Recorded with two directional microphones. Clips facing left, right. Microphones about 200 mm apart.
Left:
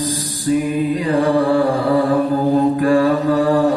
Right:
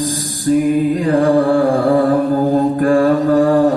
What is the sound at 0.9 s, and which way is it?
Mantra, 45° right (ahead or behind).